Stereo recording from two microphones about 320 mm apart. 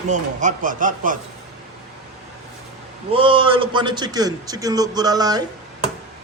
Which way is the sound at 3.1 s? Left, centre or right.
Centre.